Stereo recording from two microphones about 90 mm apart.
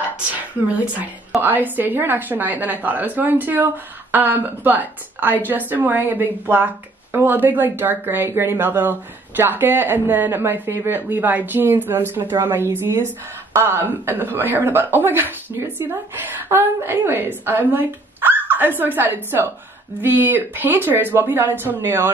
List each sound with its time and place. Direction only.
0.7 s speech: 15° right (ahead or behind)